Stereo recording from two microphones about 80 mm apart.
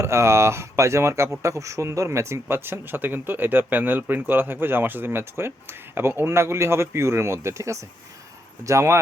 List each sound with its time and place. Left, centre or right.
0.0 s speech: right